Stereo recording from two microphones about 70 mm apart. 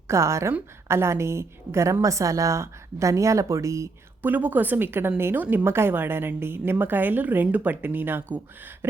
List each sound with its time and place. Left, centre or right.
0.1 s a woman's voice: right
4.2 s a woman's voice: right
8.8 s a sound: right